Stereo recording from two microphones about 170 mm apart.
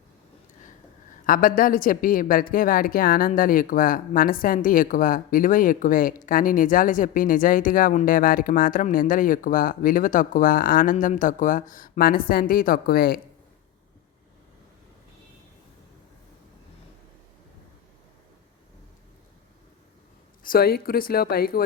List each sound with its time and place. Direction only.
1.3 s a woman's voice: 55° left (ahead or behind)
20.4 s speech: 60° left (ahead or behind)